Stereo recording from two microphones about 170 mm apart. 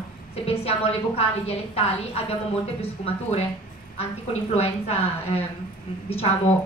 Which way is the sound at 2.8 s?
40° left (ahead or behind).